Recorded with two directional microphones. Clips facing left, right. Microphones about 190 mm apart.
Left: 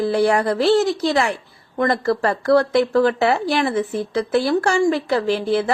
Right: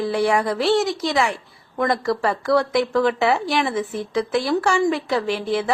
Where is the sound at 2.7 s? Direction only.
35° left (ahead or behind).